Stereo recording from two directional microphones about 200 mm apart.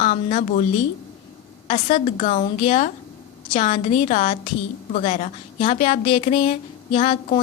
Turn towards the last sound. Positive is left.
turn(degrees=30)  # may be behind; listen again after turning